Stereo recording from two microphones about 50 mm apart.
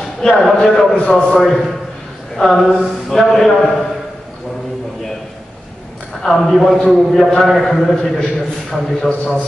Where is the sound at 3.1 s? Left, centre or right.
Centre.